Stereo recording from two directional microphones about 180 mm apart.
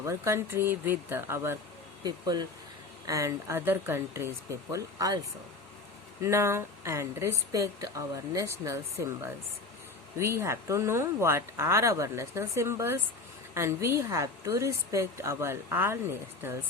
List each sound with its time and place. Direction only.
0.0 s speech: 15° right (ahead or behind)
6.2 s speech: 15° right (ahead or behind)